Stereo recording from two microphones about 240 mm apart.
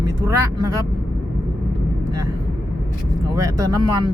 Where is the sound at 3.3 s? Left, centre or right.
Centre.